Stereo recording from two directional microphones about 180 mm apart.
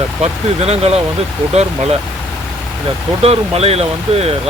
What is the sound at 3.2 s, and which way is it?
Speech, 35° right (ahead or behind).